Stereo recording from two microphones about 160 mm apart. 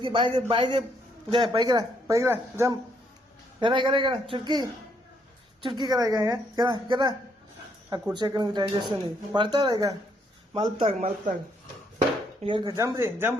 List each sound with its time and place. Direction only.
0.0 s a man's voice: 30° right (ahead or behind)
3.6 s a man's voice: 30° right (ahead or behind)
12.4 s a man's voice: 30° right (ahead or behind)
12.7 s speech: 15° right (ahead or behind)